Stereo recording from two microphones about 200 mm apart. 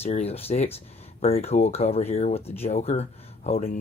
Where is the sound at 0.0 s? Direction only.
30° left (ahead or behind).